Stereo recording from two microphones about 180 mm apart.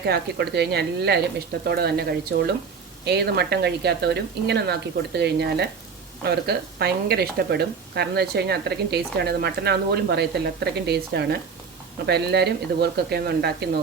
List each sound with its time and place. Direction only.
0.0 s speech: 65° right (ahead or behind)